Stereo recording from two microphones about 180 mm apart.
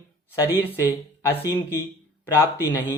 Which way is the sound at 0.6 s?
10° left (ahead or behind).